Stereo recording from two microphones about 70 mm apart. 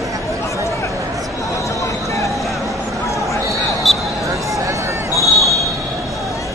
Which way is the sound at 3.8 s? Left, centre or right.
Centre.